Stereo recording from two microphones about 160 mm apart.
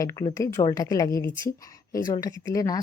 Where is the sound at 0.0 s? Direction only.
20° left (ahead or behind).